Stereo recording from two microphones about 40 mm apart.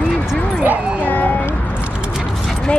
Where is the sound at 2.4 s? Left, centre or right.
Left.